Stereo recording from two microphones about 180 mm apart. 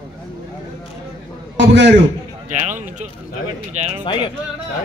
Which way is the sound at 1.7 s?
80° right.